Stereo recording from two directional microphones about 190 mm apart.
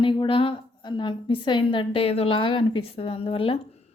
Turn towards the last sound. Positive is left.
turn(degrees=30)  # may be behind; listen again after turning